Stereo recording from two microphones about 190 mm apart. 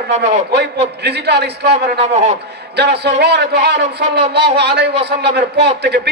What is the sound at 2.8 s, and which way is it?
A man's voice, 65° right (ahead or behind).